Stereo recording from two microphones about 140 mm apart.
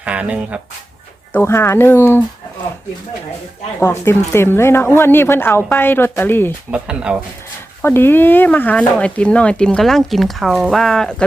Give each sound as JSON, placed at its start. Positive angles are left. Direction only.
{"t": 0.0, "sound": "speech", "side_deg": -10}
{"t": 1.3, "sound": "speech", "side_deg": 15}
{"t": 3.8, "sound": "speech", "side_deg": 20}
{"t": 6.7, "sound": "speech", "side_deg": -10}
{"t": 7.8, "sound": "speech", "side_deg": 15}